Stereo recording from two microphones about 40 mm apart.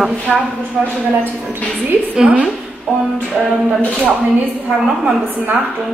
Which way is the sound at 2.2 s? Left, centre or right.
Right.